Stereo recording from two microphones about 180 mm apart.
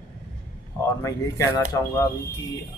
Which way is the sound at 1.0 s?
15° left (ahead or behind).